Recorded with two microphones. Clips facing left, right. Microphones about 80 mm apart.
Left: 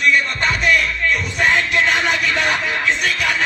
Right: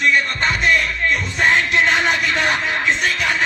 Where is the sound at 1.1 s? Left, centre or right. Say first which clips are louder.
Right 1 dB; right.